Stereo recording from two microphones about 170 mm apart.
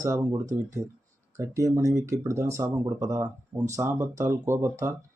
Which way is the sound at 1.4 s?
20° right (ahead or behind).